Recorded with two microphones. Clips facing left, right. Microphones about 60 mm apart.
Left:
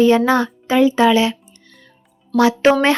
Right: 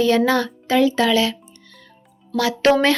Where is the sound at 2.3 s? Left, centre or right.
Left.